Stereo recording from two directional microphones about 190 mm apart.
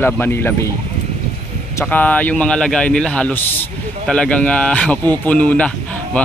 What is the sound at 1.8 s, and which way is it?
A man's voice, 10° left (ahead or behind).